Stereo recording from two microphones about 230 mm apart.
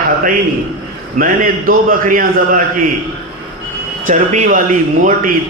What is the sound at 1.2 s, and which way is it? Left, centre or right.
A man's voice, right.